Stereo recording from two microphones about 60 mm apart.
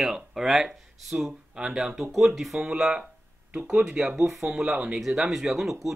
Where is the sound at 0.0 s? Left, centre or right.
Centre.